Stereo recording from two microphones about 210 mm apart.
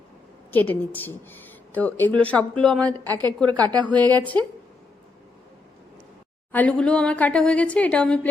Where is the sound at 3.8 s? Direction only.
5° left (ahead or behind).